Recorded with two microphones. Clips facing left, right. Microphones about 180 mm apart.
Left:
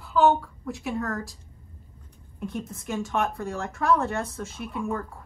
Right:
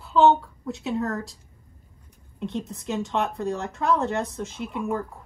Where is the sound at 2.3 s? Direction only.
20° right (ahead or behind).